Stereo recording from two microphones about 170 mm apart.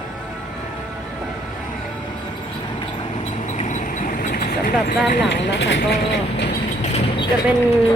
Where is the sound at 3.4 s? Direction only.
45° left (ahead or behind).